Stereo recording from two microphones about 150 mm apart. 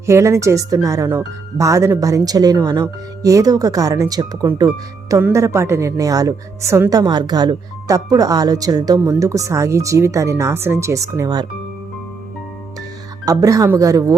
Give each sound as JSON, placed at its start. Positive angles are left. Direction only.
{"t": 0.0, "sound": "a woman's voice", "side_deg": -20}
{"t": 13.2, "sound": "a woman's voice", "side_deg": -25}